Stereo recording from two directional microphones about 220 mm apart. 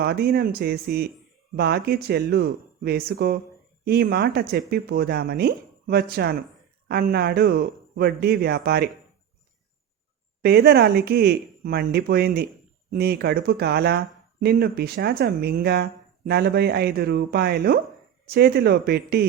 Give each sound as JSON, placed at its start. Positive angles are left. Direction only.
{"t": 0.0, "sound": "speech", "side_deg": -45}
{"t": 10.4, "sound": "speech", "side_deg": -45}